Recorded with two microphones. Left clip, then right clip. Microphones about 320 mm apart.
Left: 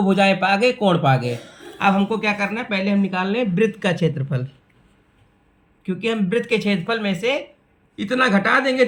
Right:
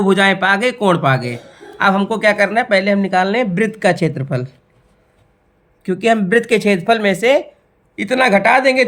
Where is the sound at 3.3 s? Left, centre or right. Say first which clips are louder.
Right 3 dB; centre.